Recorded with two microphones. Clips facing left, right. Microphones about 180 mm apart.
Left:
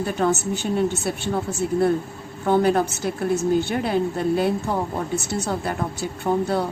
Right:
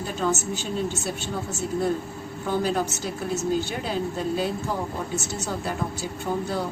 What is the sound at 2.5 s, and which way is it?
A woman's voice, 60° left (ahead or behind).